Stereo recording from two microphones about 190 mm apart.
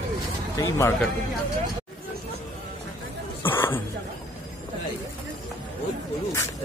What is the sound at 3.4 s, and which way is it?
Throat clearing, 10° left (ahead or behind).